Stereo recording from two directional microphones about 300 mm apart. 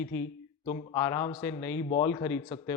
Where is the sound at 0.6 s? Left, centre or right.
Centre.